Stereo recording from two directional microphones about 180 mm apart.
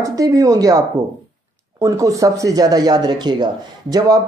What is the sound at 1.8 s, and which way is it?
Speech, 20° right (ahead or behind).